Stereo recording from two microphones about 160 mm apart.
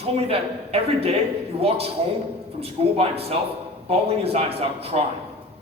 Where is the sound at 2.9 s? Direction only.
40° right (ahead or behind).